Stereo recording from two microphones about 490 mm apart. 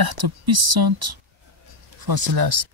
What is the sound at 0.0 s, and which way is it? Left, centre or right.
Speech, right.